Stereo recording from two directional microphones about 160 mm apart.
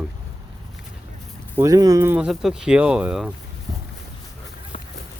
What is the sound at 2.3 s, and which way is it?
Speech, centre (ahead or behind).